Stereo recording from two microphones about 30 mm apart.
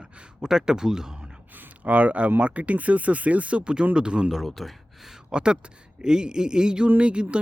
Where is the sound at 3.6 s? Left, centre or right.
Right.